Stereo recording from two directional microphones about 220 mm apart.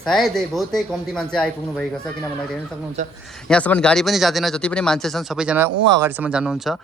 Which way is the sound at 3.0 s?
35° right (ahead or behind).